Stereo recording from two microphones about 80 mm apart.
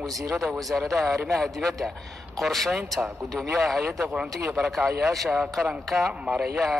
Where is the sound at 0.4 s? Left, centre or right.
Centre.